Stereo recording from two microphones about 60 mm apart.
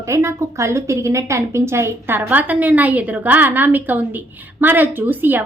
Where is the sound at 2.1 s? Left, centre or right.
Right.